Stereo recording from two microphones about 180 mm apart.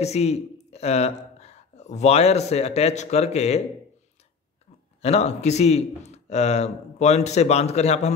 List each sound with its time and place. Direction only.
0.0 s speech: 35° left (ahead or behind)
5.0 s a man's voice: 35° left (ahead or behind)